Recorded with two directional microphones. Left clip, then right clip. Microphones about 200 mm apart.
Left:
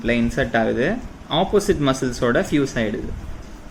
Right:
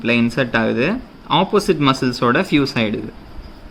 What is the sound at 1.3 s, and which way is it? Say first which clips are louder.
Speech: right 3 dB; 40° right (ahead or behind).